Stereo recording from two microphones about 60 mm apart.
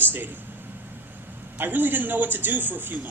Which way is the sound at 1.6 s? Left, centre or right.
Right.